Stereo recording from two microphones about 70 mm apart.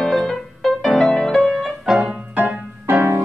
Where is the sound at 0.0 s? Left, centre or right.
Centre.